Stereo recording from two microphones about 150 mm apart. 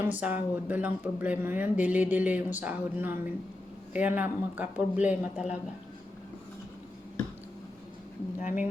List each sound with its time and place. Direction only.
0.0 s speech: 10° right (ahead or behind)
8.4 s speech: 55° left (ahead or behind)